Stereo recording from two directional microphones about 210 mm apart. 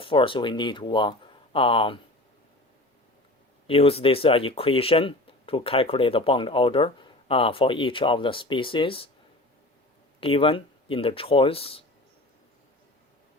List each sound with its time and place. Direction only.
0.0 s speech: 25° left (ahead or behind)
3.7 s speech: 30° left (ahead or behind)
10.2 s speech: 25° left (ahead or behind)